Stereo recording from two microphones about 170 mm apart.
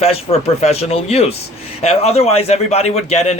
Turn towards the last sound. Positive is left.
turn(degrees=40)  # may be behind; listen again after turning